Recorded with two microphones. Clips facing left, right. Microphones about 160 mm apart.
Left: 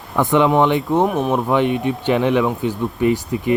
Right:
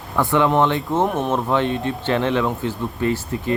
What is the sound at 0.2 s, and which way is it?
Speech, 20° left (ahead or behind).